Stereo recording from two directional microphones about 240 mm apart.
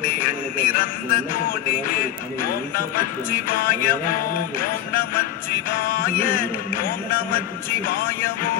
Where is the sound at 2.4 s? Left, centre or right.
Left.